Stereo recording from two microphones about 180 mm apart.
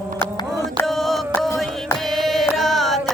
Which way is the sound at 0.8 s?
Centre (ahead or behind).